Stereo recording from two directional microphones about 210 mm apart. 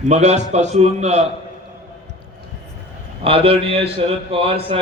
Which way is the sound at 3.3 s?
25° right (ahead or behind).